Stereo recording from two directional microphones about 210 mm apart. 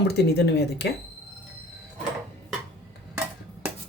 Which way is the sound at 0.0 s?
50° left (ahead or behind).